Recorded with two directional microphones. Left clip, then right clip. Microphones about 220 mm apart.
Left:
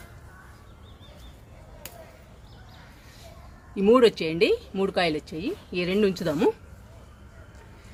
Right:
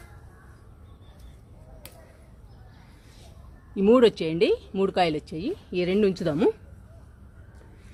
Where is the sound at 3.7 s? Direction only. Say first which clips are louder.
Even; 30° right (ahead or behind).